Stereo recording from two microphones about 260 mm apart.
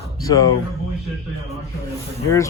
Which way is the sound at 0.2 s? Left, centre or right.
Centre.